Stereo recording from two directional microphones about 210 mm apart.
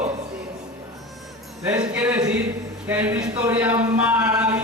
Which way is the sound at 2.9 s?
10° right (ahead or behind).